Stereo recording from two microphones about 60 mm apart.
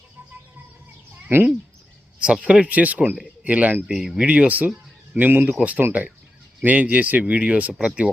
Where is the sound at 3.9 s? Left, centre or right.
Centre.